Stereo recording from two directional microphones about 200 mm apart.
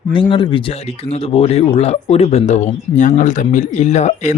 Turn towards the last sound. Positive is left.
turn(degrees=35)  # may be behind; listen again after turning